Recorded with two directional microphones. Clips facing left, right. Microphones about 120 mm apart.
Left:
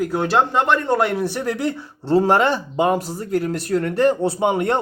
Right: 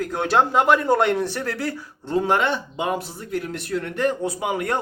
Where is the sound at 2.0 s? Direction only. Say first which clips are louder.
Left 5 dB; 35° left (ahead or behind).